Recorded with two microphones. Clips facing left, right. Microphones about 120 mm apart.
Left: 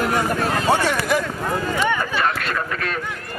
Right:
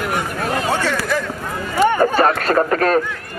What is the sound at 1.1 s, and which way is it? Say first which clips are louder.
Clip-clop: left 2 dB; 15° left (ahead or behind).